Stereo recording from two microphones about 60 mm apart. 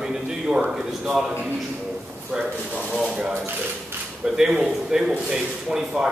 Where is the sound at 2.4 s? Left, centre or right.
Centre.